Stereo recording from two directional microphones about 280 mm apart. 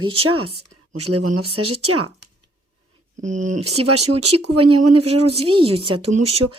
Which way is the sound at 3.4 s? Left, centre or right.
Right.